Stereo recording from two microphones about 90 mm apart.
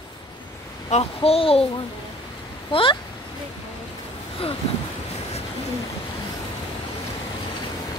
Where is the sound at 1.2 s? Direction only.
90° left.